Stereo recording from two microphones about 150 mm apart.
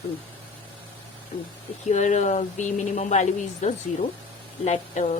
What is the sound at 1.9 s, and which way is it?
Speech, 55° left (ahead or behind).